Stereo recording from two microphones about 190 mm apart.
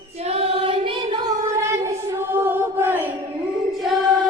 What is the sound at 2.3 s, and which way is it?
Chant, 10° right (ahead or behind).